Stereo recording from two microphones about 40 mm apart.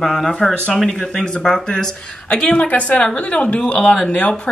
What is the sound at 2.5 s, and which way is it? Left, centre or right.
Speech, left.